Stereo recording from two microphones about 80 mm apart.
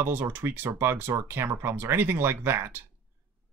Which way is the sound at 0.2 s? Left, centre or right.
Right.